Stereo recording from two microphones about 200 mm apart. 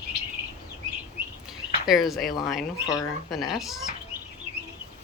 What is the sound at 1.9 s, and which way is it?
Speech, centre (ahead or behind).